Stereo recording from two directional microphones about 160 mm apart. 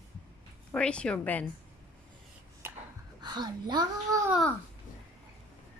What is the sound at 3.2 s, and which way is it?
Speech, 25° right (ahead or behind).